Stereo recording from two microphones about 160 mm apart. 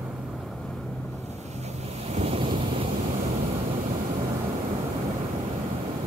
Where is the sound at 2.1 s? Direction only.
40° right (ahead or behind).